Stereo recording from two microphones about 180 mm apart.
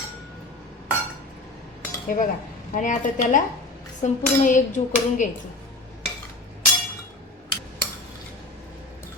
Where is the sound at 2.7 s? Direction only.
45° left (ahead or behind).